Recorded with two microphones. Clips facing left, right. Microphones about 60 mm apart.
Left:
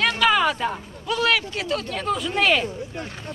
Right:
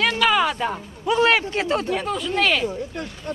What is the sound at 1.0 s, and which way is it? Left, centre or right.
Speech, right.